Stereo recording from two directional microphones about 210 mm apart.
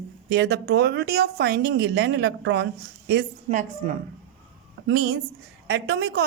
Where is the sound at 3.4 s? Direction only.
35° right (ahead or behind).